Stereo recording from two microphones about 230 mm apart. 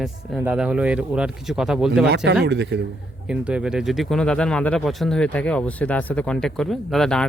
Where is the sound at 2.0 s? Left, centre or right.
Right.